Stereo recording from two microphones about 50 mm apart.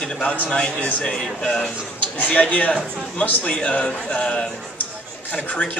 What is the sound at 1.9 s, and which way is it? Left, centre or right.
A man's voice, left.